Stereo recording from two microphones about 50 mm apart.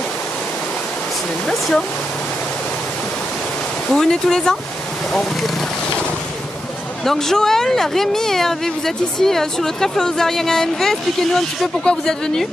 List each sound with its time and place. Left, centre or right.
1.5 s speech: centre
3.9 s speech: centre
7.1 s speech: centre
11.8 s a woman's voice: centre